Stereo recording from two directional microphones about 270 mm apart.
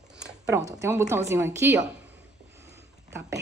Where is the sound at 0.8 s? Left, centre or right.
Centre.